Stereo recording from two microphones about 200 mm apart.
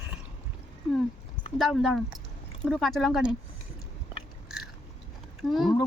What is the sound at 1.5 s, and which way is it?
Speech, centre (ahead or behind).